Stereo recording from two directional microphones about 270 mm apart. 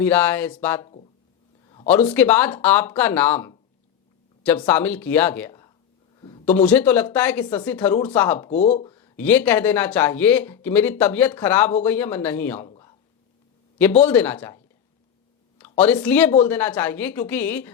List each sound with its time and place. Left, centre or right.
0.0 s speech: centre
1.9 s speech: centre
6.1 s a sound: centre
6.4 s speech: centre
8.4 s speech: left
9.2 s speech: centre
12.6 s a sound: centre
14.0 s speech: centre